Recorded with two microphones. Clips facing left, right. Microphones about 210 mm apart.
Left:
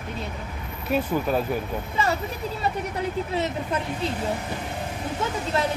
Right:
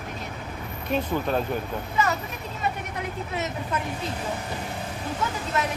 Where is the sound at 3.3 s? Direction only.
30° left (ahead or behind).